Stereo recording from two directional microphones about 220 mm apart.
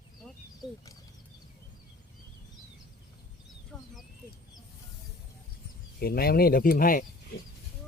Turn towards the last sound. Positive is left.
turn(degrees=40)  # may be behind; listen again after turning